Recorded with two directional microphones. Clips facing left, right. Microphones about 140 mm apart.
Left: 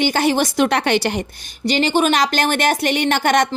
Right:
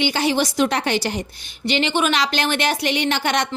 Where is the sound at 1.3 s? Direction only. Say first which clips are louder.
Left 3 dB; 40° left (ahead or behind).